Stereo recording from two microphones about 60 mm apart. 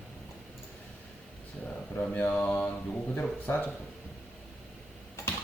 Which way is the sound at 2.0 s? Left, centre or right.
Left.